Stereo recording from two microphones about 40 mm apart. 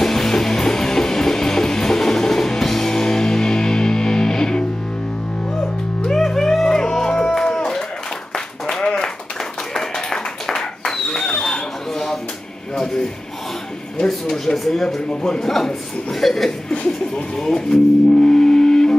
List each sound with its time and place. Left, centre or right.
0.0 s music: centre
6.0 s music: centre
8.6 s clapping: centre
9.8 s tap: centre
10.1 s clapping: centre
12.7 s a sound: centre
15.0 s a sound: centre
15.4 s chuckle: centre
16.7 s chuckle: left
17.4 s music: centre